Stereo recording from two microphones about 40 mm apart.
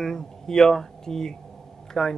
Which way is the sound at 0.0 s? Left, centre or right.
Centre.